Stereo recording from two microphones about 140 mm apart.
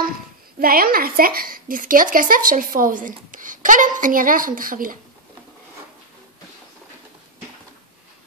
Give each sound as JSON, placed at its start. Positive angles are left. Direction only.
{"t": 0.6, "sound": "a woman's voice", "side_deg": -90}